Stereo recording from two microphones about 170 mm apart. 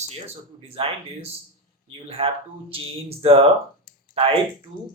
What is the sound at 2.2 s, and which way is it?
Speech, 35° right (ahead or behind).